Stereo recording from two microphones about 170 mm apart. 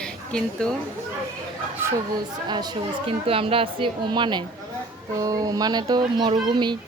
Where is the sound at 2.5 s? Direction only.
25° right (ahead or behind).